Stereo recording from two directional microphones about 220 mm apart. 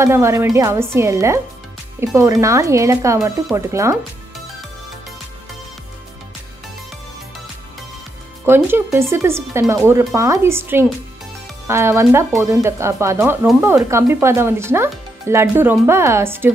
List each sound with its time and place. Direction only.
0.0 s speech: 10° right (ahead or behind)
8.5 s speech: 10° right (ahead or behind)